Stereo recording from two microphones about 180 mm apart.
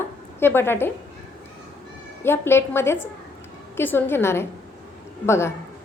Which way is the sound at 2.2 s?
15° left (ahead or behind).